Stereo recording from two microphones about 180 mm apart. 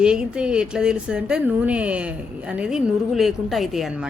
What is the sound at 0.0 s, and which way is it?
Speech, 5° right (ahead or behind).